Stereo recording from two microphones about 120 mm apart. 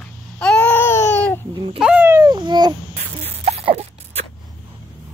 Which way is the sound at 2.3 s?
40° right (ahead or behind).